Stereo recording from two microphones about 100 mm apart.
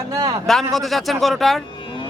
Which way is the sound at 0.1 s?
40° right (ahead or behind).